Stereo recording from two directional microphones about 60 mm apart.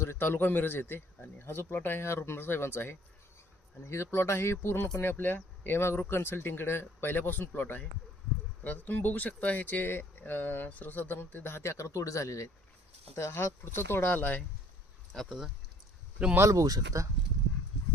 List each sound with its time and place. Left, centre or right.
0.0 s speech: left
13.1 s speech: left
15.1 s speech: centre
16.4 s speech: right